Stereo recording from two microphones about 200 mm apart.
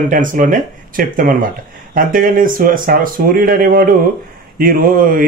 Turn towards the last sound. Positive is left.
turn(degrees=-45)  # may be behind; listen again after turning